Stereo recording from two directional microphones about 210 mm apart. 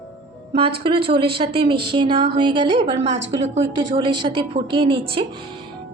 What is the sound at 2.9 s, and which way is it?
Speech, 60° right (ahead or behind).